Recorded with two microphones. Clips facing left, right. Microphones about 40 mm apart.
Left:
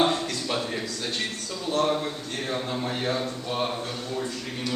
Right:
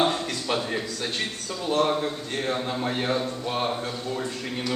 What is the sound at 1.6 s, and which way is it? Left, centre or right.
Speech, centre.